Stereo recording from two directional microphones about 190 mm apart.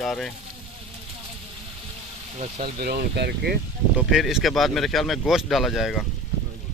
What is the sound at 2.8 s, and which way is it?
Speech, 55° right (ahead or behind).